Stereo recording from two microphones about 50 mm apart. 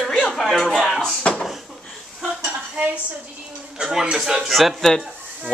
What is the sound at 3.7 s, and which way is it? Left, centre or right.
Speech, centre.